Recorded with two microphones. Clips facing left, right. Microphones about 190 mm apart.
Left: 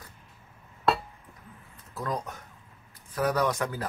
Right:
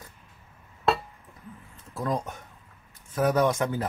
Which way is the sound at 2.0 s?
25° right (ahead or behind).